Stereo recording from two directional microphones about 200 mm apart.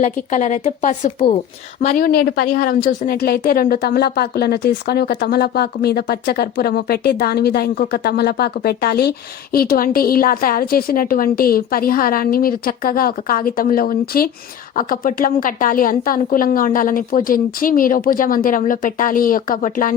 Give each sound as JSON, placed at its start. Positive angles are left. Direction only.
{"t": 0.0, "sound": "a woman's voice", "side_deg": 35}